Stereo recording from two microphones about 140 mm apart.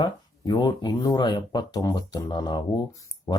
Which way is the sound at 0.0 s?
30° left (ahead or behind).